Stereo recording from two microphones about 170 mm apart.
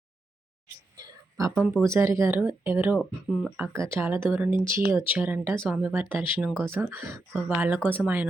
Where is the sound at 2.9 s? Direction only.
Centre (ahead or behind).